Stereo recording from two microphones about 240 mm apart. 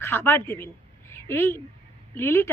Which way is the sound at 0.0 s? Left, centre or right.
Centre.